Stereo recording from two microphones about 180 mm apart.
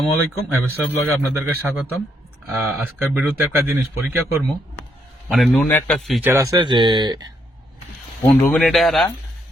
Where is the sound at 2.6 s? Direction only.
10° right (ahead or behind).